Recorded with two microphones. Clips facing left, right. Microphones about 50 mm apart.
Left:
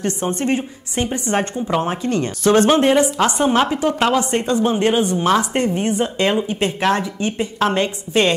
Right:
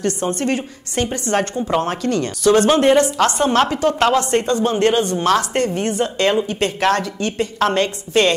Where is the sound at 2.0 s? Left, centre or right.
Left.